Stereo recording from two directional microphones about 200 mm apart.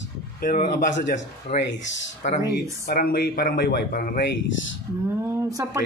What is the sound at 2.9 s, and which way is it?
Speech, 50° left (ahead or behind).